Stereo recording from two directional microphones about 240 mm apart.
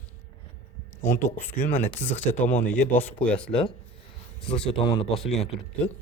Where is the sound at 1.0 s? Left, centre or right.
Centre.